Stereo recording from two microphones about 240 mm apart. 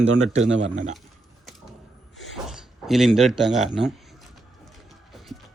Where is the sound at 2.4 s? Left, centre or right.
Centre.